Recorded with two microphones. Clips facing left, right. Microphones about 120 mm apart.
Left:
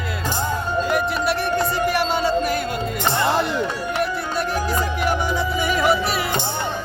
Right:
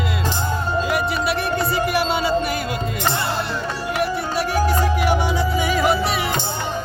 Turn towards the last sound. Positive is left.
turn(degrees=0)  # may be behind; listen again after turning